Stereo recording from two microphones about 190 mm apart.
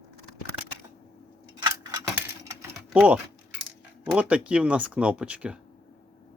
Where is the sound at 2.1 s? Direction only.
15° right (ahead or behind).